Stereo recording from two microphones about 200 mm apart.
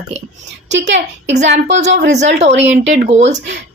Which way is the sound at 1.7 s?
35° right (ahead or behind).